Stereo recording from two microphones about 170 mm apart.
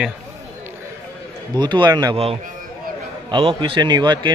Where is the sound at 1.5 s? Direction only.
25° right (ahead or behind).